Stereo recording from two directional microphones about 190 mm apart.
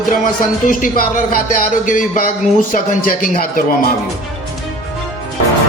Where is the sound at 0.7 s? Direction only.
45° left (ahead or behind).